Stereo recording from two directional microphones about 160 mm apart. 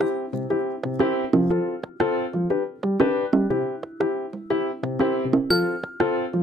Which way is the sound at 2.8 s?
Centre (ahead or behind).